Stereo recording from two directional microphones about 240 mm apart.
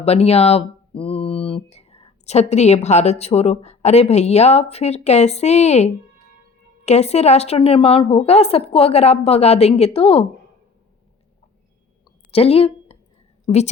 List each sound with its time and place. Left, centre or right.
0.0 s a woman's voice: left
12.3 s a sound: left
13.5 s a woman's voice: left